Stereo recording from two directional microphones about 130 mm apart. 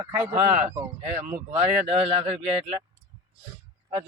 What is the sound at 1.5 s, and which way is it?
Speech, 50° right (ahead or behind).